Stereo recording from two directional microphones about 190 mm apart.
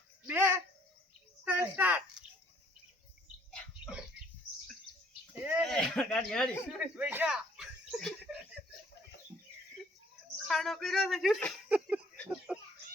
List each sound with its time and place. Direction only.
0.3 s bird: 10° right (ahead or behind)
1.5 s speech: 10° right (ahead or behind)
5.4 s a sound: 10° right (ahead or behind)
5.9 s speech: 5° left (ahead or behind)
10.4 s speech: centre (ahead or behind)
12.5 s a sound: 5° right (ahead or behind)